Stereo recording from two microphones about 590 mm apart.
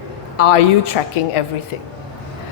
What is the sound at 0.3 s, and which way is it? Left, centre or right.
A woman's voice, left.